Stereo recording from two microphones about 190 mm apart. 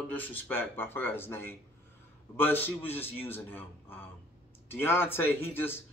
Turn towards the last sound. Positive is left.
turn(degrees=10)  # may be behind; listen again after turning